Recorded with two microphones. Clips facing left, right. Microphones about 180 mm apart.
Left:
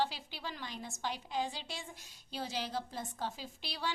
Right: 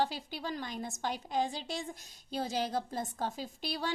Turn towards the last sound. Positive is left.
turn(degrees=-45)  # may be behind; listen again after turning